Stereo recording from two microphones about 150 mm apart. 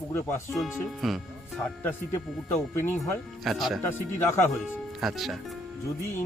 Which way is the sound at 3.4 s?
Centre (ahead or behind).